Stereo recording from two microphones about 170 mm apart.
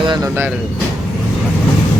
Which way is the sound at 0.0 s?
25° right (ahead or behind).